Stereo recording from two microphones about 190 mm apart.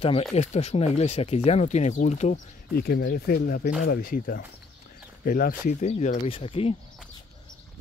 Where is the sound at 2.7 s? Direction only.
55° left (ahead or behind).